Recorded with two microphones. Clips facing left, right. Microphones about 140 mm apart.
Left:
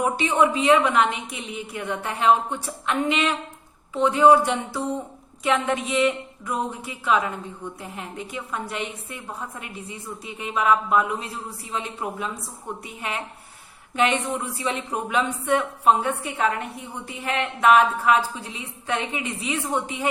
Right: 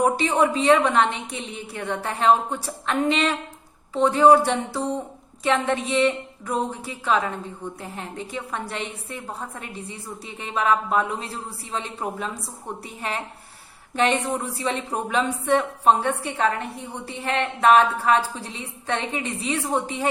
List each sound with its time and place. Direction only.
0.0 s a woman's voice: 35° right (ahead or behind)